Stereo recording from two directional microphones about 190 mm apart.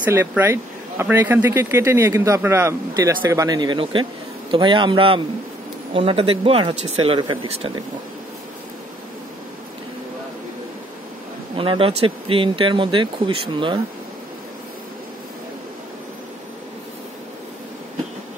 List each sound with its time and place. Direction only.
0.0 s speech: 15° right (ahead or behind); by 7.8 s 30° right (ahead or behind)
11.5 s speech: 25° right (ahead or behind)